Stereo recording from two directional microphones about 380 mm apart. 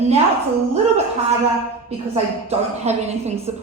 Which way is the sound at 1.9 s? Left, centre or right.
Centre.